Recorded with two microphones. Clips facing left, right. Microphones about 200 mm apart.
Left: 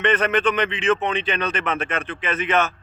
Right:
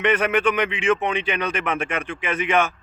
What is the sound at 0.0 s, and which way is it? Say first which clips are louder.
A man's voice: even; 10° right (ahead or behind).